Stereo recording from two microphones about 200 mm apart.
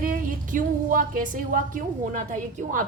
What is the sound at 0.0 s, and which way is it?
A woman's voice, 40° right (ahead or behind).